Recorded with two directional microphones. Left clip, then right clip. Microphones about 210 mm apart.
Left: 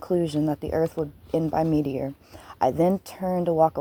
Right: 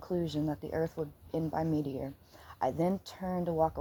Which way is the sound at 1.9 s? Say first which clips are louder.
Left 10 dB; 35° left (ahead or behind).